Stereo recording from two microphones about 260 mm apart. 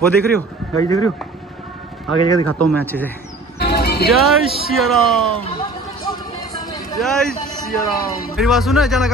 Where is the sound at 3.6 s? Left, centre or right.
Left.